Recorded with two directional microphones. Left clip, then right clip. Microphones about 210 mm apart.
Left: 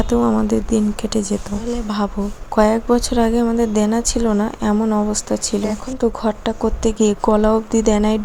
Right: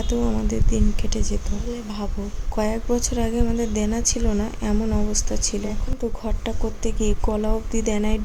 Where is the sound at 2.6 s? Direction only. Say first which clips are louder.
Left 9 dB; 15° left (ahead or behind).